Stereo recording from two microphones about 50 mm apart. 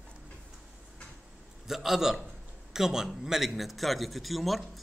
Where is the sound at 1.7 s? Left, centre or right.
Centre.